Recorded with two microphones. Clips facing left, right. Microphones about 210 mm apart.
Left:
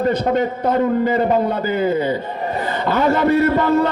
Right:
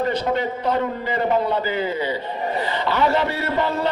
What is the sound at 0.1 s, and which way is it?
A man's voice, 45° left (ahead or behind).